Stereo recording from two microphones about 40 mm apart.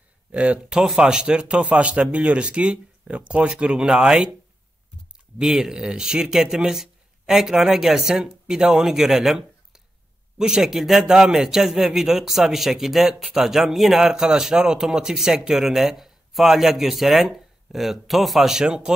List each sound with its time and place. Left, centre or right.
0.3 s speech: right
0.9 s speech: centre
5.4 s speech: centre
18.5 s speech: right